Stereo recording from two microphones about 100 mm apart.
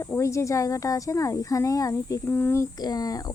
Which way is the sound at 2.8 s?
40° left (ahead or behind).